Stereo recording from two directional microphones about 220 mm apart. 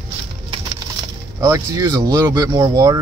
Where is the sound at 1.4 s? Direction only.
15° right (ahead or behind).